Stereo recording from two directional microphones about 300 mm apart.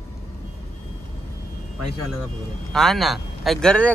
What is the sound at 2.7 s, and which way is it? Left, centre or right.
Speech, centre.